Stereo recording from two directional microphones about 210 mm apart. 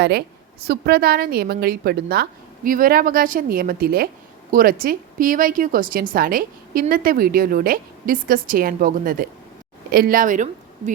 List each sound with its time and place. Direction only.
0.0 s a woman's voice: 50° right (ahead or behind)